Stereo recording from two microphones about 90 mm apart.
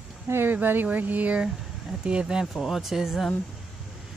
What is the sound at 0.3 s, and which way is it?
Speech, 20° right (ahead or behind).